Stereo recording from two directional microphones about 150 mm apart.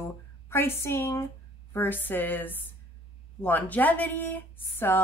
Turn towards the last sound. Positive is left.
turn(degrees=15)  # may be behind; listen again after turning